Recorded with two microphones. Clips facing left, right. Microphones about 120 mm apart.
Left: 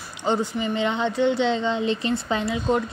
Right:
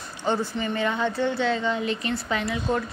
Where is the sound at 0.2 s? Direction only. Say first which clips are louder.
Left 2 dB; 15° left (ahead or behind).